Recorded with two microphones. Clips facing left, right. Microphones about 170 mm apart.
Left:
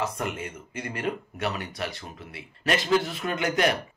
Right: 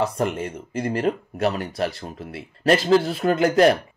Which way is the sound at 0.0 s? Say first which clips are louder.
Right 7 dB; 35° right (ahead or behind).